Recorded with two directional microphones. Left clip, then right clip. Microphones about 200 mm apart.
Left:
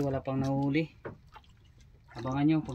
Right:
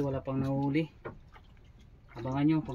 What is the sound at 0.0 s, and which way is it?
Speech, 20° left (ahead or behind).